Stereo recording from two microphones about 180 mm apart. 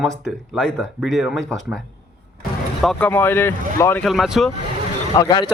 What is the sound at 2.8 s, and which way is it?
Speech, 5° left (ahead or behind).